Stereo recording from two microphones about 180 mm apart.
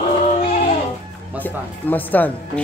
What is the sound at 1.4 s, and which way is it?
Speech, 10° left (ahead or behind).